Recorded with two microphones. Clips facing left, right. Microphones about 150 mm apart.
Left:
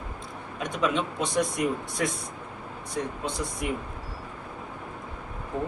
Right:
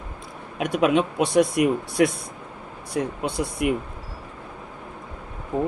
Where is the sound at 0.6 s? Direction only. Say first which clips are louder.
Right 7 dB; 65° right (ahead or behind).